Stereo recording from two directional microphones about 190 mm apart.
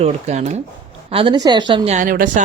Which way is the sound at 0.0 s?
35° right (ahead or behind).